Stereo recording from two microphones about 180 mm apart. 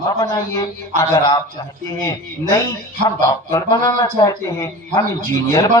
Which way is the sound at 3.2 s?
20° left (ahead or behind).